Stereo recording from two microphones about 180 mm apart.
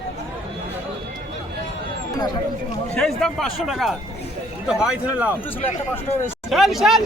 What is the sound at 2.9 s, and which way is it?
Speech, 5° left (ahead or behind).